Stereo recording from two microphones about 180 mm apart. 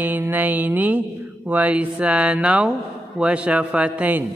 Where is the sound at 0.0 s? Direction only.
10° right (ahead or behind).